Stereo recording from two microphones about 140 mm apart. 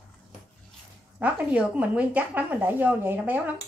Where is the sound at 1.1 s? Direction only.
10° right (ahead or behind).